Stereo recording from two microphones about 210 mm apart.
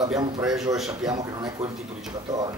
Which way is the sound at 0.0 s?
15° right (ahead or behind).